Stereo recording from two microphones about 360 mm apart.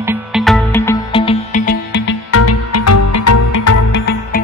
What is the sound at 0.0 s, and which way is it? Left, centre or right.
Music, centre.